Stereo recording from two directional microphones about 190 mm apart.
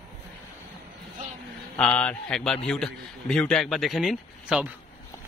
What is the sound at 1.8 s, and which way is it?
A man's voice, 5° left (ahead or behind).